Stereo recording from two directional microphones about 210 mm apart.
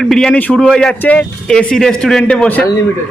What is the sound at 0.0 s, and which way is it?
A man's voice, 5° left (ahead or behind).